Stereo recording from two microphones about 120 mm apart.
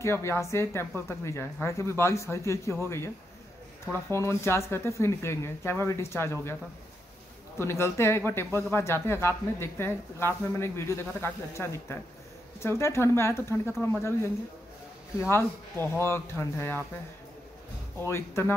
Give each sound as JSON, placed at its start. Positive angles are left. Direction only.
{"t": 0.0, "sound": "speech", "side_deg": 20}
{"t": 3.8, "sound": "speech", "side_deg": 20}
{"t": 7.5, "sound": "speech", "side_deg": 20}
{"t": 15.1, "sound": "speech", "side_deg": 20}
{"t": 18.0, "sound": "speech", "side_deg": 20}